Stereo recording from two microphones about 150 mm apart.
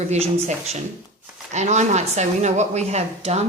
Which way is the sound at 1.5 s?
50° right (ahead or behind).